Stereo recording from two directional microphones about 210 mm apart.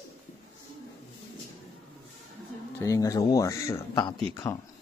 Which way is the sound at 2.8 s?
15° left (ahead or behind).